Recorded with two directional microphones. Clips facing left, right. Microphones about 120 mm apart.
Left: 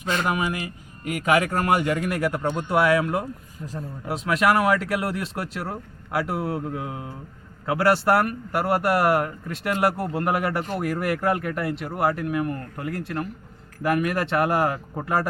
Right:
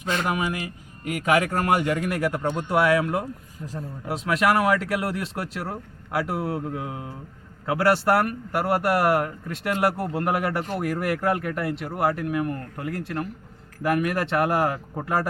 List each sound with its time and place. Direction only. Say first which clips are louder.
0.1 s speech: left 1 dB; 10° left (ahead or behind); by 5.6 s 25° left (ahead or behind)
6.2 s speech: even; 15° left (ahead or behind)